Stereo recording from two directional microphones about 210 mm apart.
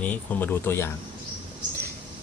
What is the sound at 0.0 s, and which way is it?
Speech, 10° left (ahead or behind).